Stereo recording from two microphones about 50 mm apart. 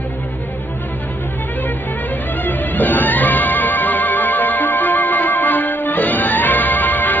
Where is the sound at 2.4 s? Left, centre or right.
Left.